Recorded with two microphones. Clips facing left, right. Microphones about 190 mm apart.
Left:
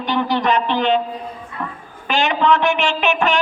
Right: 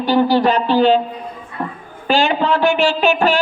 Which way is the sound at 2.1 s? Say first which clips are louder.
Right 1 dB; 35° right (ahead or behind).